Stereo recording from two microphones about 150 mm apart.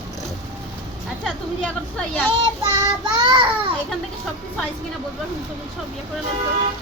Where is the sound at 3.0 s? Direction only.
30° right (ahead or behind).